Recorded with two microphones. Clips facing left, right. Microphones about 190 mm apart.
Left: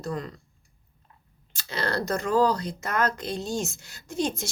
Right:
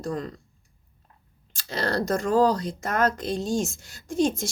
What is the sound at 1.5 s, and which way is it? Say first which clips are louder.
A woman's voice: right 2 dB; 45° right (ahead or behind).